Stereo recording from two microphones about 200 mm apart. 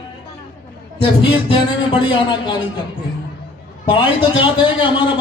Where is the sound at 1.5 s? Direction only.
25° left (ahead or behind).